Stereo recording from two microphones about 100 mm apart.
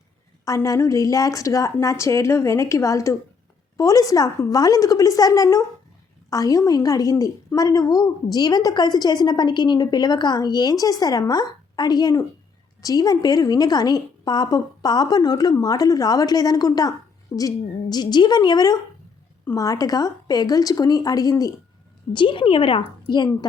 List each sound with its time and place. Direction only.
0.4 s a woman's voice: 35° left (ahead or behind)
22.1 s a woman's voice: 55° left (ahead or behind)